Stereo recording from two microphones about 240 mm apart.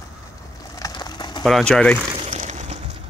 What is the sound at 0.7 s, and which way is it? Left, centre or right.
Bird, centre.